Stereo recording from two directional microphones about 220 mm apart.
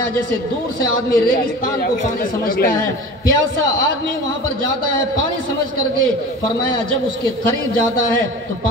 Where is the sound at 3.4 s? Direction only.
60° right (ahead or behind).